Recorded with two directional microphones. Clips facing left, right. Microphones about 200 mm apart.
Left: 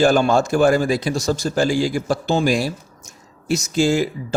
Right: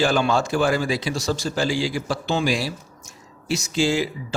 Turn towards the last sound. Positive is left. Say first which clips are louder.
# left 4 dB
turn(degrees=45)  # may be behind; listen again after turning